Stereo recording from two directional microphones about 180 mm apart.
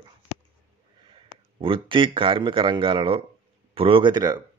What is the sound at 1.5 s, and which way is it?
Speech, 30° right (ahead or behind).